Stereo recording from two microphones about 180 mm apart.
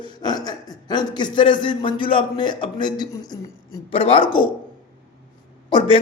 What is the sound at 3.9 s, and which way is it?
Speech, 30° left (ahead or behind).